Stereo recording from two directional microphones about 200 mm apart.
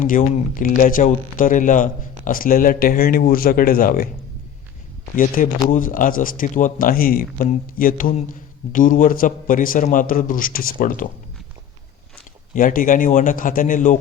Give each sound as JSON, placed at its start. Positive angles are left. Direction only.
{"t": 0.0, "sound": "speech", "side_deg": 40}
{"t": 5.1, "sound": "a man's voice", "side_deg": 40}
{"t": 12.5, "sound": "a man's voice", "side_deg": 45}